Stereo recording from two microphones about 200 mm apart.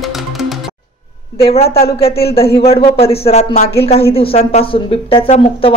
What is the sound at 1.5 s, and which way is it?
Speech, 30° left (ahead or behind).